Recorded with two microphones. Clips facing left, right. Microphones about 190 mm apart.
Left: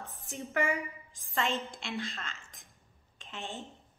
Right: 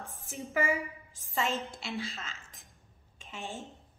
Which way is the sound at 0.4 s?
Centre (ahead or behind).